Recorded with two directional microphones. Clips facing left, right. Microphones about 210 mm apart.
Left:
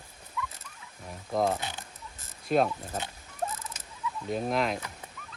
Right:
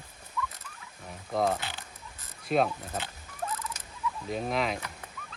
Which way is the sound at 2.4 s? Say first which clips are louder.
Left 1 dB; centre (ahead or behind).